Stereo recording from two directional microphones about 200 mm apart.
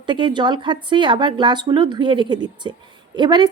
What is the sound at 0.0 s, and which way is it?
A woman's voice, 25° right (ahead or behind).